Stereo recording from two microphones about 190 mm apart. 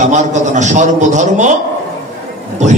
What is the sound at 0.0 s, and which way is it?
A man's voice, 40° right (ahead or behind).